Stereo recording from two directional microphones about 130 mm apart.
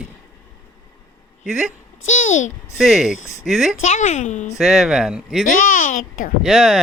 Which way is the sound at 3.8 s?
65° left (ahead or behind).